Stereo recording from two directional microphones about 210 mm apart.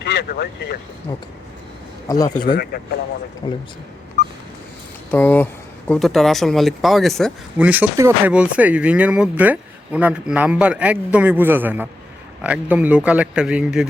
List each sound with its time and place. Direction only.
0.0 s speech: 50° left (ahead or behind)
2.0 s speech: 15° left (ahead or behind)
2.7 s speech: 50° left (ahead or behind)
3.4 s speech: 20° left (ahead or behind)
5.1 s speech: 10° left (ahead or behind)